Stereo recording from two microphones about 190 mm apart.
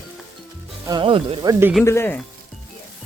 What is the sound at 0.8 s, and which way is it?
Speech, 25° right (ahead or behind).